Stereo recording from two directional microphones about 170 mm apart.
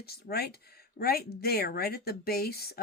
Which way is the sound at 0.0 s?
65° left (ahead or behind).